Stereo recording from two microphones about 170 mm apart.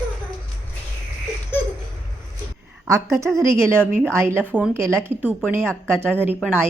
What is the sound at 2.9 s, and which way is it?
A woman's voice, 20° right (ahead or behind).